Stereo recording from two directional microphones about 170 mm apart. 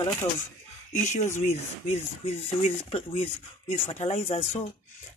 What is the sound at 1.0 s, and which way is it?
Speech, 45° left (ahead or behind).